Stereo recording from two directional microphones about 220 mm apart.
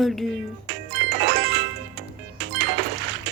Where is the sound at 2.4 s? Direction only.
50° right (ahead or behind).